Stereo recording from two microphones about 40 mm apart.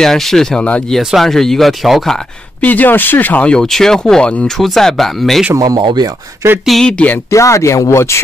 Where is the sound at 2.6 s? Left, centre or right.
Left.